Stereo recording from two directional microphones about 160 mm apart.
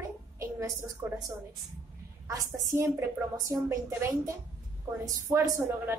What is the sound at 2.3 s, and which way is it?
A woman's voice, 20° right (ahead or behind).